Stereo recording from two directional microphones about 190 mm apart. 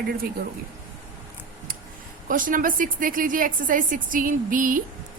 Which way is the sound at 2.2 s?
45° right (ahead or behind).